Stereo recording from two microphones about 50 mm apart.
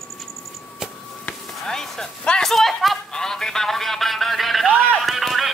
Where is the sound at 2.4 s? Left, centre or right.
Centre.